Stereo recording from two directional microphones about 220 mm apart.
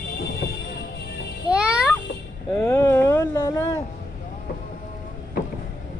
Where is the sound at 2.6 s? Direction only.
10° left (ahead or behind).